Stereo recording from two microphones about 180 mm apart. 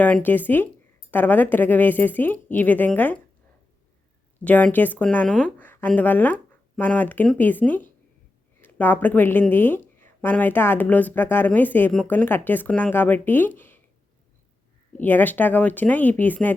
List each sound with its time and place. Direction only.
0.0 s speech: 10° left (ahead or behind)
4.4 s speech: 10° left (ahead or behind)
14.9 s speech: 10° left (ahead or behind)